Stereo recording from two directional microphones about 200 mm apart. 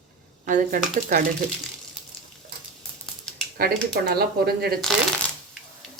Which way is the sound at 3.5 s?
50° right (ahead or behind).